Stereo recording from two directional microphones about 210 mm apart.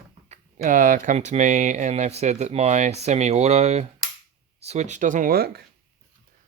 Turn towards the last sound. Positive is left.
turn(degrees=-45)  # may be behind; listen again after turning